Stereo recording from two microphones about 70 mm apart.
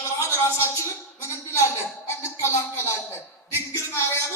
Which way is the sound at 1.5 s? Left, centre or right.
Left.